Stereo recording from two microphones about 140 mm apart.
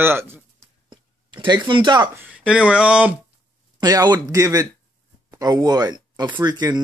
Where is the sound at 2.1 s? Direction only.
10° right (ahead or behind).